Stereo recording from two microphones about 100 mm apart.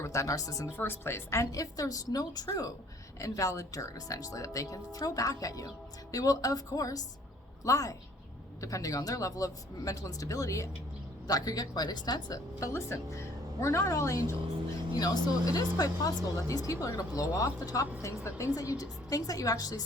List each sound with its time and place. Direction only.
0.0 s speech: 30° left (ahead or behind)
0.8 s a woman's voice: 25° left (ahead or behind); by 19.8 s 40° left (ahead or behind)